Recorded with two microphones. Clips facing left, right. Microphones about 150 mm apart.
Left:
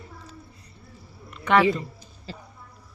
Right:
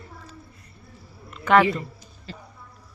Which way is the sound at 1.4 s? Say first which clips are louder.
Right 2 dB; centre (ahead or behind).